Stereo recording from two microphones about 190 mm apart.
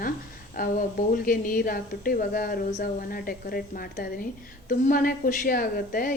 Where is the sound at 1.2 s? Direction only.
50° left (ahead or behind).